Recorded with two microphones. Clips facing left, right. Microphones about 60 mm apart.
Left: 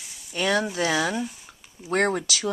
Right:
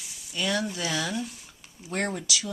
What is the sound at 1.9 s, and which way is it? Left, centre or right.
Speech, left.